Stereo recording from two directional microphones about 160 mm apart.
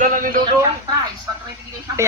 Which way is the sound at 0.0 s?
60° right (ahead or behind).